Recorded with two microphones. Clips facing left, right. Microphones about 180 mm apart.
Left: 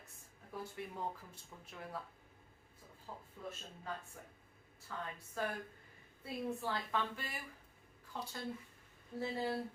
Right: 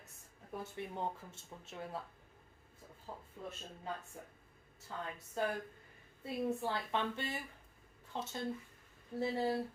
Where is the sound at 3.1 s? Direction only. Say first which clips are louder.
Right 1 dB; 20° right (ahead or behind).